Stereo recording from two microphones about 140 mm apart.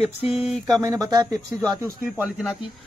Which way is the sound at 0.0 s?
50° left (ahead or behind).